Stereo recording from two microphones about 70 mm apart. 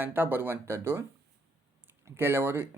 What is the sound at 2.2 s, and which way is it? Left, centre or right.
Speech, right.